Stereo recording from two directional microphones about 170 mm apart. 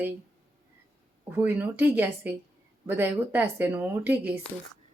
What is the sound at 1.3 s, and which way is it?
Speech, 10° right (ahead or behind).